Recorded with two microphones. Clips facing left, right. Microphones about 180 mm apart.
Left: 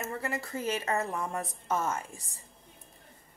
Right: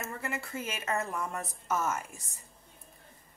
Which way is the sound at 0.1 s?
35° left (ahead or behind).